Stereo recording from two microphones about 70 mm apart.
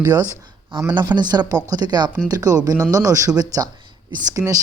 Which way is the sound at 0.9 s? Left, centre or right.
Right.